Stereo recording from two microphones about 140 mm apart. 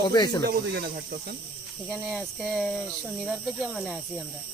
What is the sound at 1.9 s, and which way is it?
Speech, centre (ahead or behind).